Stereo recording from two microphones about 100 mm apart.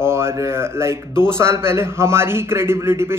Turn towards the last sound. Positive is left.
turn(degrees=-25)  # may be behind; listen again after turning